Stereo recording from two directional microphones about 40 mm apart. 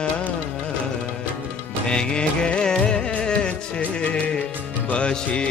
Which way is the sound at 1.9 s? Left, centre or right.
Left.